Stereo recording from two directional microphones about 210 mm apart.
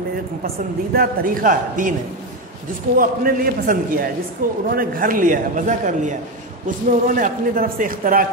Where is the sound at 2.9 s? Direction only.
45° right (ahead or behind).